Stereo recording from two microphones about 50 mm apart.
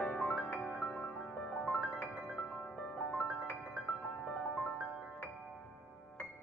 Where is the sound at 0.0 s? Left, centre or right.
Left.